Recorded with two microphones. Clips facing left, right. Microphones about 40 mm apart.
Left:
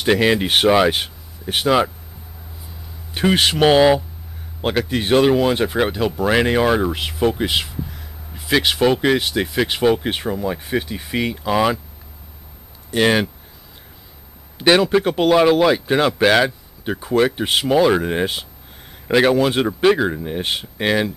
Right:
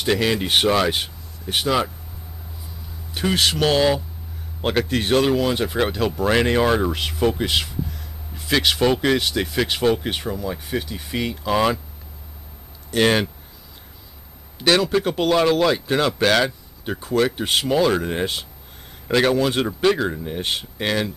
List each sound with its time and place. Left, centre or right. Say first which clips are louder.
0.0 s speech: left 4 dB; left
3.2 s speech: left 4 dB; left
4.6 s speech: left 1 dB; centre
12.9 s speech: left 2 dB; centre
14.6 s speech: left 4 dB; left